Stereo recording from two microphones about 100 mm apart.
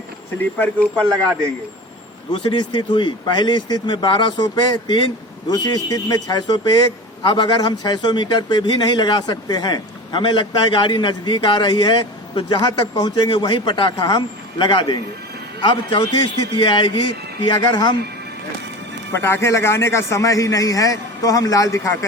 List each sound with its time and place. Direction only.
2.3 s a man's voice: 50° left (ahead or behind)
16.6 s a man's voice: 55° left (ahead or behind)
19.2 s a man's voice: 25° left (ahead or behind)